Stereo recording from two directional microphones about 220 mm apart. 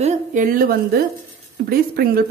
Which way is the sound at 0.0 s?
35° right (ahead or behind).